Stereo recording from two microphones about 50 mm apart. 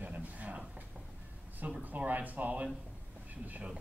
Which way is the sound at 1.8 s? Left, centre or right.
Right.